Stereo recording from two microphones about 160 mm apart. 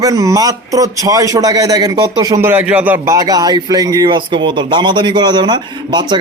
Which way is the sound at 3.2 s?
25° right (ahead or behind).